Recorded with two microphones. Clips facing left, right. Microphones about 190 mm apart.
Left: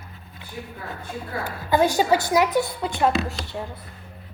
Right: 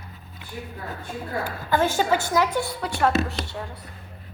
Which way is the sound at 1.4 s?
15° left (ahead or behind).